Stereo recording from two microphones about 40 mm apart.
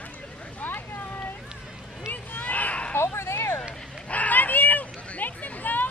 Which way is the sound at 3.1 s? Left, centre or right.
Left.